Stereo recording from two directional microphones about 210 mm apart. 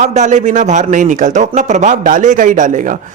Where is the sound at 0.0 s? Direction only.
35° right (ahead or behind).